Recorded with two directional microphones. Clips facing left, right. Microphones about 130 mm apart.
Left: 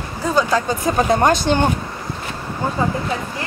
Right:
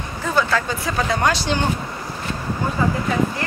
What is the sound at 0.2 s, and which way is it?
Speech, 15° left (ahead or behind).